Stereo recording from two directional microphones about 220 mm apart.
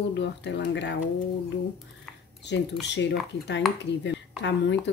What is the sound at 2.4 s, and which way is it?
A woman's voice, 50° left (ahead or behind).